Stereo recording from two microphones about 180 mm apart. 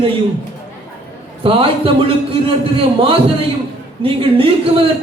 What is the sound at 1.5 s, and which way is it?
A man's voice, 30° right (ahead or behind).